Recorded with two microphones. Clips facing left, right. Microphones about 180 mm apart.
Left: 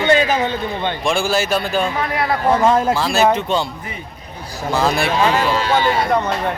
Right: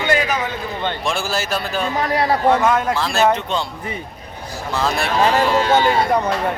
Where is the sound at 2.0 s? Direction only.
35° right (ahead or behind).